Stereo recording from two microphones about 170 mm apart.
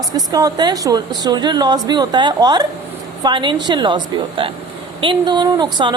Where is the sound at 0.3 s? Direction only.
20° right (ahead or behind).